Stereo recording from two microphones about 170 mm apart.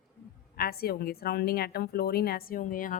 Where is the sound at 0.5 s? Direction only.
65° left (ahead or behind).